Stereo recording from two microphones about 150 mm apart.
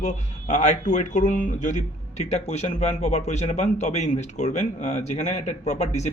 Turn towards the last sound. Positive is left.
turn(degrees=45)  # may be behind; listen again after turning